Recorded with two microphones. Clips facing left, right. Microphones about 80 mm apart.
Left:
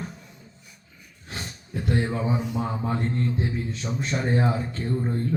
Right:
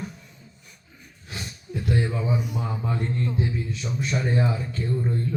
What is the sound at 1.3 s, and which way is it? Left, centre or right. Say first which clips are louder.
A man's voice: right 1 dB; left.